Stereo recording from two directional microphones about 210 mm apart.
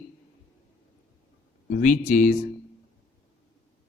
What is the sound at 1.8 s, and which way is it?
Speech, 40° left (ahead or behind).